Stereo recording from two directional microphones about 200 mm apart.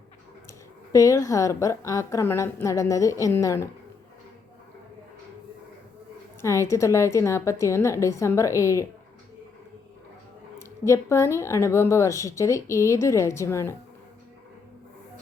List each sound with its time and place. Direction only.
0.9 s a woman's voice: 15° left (ahead or behind)
6.4 s a woman's voice: 15° left (ahead or behind)
10.6 s a woman's voice: 15° left (ahead or behind)